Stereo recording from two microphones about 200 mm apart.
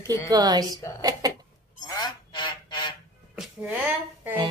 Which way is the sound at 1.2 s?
20° right (ahead or behind).